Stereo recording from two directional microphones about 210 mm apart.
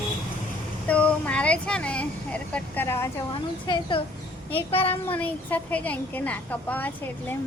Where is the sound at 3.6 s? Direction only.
20° left (ahead or behind).